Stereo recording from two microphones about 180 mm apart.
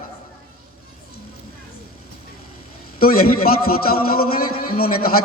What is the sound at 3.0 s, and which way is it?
A man's voice, 55° left (ahead or behind).